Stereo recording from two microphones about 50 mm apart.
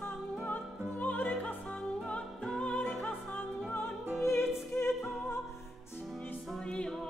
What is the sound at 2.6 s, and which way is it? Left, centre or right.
Music, left.